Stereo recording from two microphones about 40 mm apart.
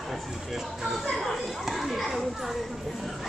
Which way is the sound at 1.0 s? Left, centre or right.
Centre.